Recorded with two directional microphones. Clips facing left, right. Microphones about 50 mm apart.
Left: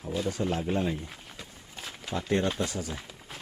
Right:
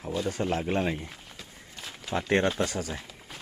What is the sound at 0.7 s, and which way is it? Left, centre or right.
Speech, right.